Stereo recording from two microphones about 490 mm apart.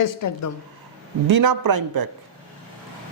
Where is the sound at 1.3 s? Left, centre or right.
Right.